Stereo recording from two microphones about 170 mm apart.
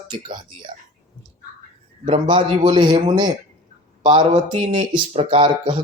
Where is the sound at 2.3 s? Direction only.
25° right (ahead or behind).